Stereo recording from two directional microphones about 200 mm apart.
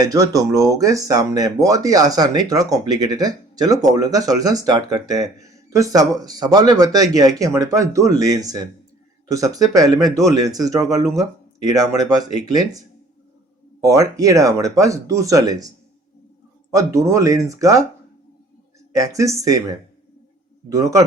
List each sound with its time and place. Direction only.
0.0 s speech: 15° right (ahead or behind)
13.8 s speech: 15° right (ahead or behind)
16.7 s speech: 15° right (ahead or behind)
18.9 s speech: 15° right (ahead or behind)